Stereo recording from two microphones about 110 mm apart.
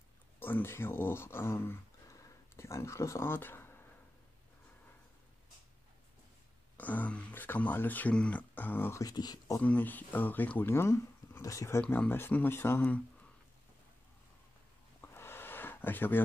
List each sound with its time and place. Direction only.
0.4 s speech: 20° left (ahead or behind)
6.8 s speech: 15° left (ahead or behind)
9.0 s speech: 40° left (ahead or behind)
9.6 s speech: 15° left (ahead or behind)
11.8 s speech: 15° left (ahead or behind)
15.0 s a sound: 20° left (ahead or behind)